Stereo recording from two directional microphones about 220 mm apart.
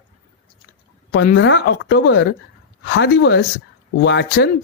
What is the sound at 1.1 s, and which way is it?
Speech, 50° left (ahead or behind).